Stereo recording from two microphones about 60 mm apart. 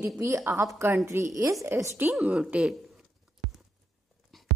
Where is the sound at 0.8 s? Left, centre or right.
Right.